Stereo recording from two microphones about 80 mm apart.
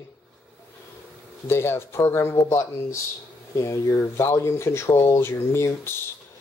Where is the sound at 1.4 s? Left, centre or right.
Left.